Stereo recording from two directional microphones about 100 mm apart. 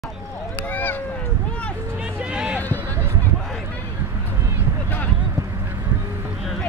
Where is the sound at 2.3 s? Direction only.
10° right (ahead or behind).